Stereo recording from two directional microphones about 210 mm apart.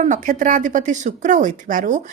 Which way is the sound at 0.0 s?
35° right (ahead or behind).